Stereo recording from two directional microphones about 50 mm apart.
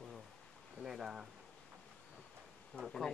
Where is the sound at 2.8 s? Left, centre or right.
Centre.